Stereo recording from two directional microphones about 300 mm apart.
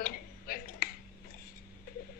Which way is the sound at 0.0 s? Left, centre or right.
Left.